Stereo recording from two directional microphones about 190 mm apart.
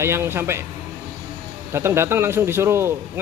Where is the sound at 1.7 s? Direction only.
15° right (ahead or behind).